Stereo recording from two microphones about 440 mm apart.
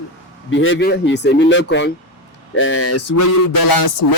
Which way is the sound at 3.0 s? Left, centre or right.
Left.